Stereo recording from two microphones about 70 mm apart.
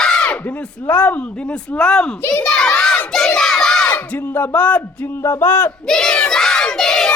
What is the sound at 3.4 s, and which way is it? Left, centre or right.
Crowd, centre.